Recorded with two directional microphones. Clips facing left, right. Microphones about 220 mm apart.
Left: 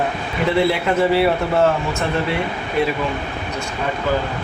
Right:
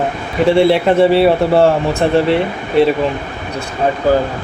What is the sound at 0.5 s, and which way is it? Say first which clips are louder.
Speech: right 6 dB; 30° right (ahead or behind).